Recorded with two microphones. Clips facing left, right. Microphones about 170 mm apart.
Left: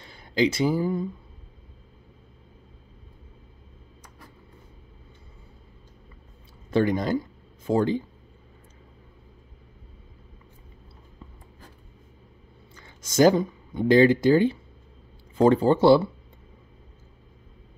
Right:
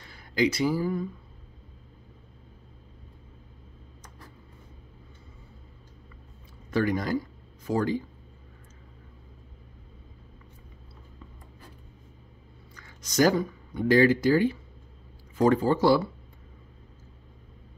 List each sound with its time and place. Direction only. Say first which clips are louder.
0.0 s speech: left 2 dB; 25° left (ahead or behind)
6.7 s speech: left 3 dB; 25° left (ahead or behind)
12.7 s speech: left 3 dB; 25° left (ahead or behind)